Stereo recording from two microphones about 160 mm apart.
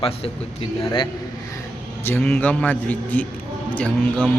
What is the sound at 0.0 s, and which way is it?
Speech, 35° left (ahead or behind).